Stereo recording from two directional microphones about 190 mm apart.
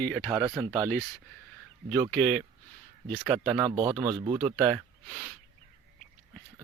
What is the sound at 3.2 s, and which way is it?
Speech, 5° right (ahead or behind).